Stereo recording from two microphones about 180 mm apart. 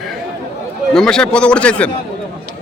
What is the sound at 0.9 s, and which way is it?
Speech, 5° left (ahead or behind).